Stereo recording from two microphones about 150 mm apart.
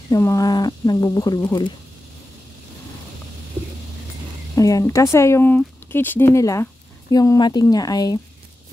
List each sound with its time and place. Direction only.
0.1 s speech: 20° left (ahead or behind)
4.6 s speech: 20° left (ahead or behind)